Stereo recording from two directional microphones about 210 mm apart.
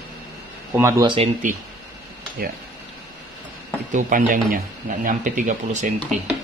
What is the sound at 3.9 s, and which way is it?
Speech, 40° right (ahead or behind).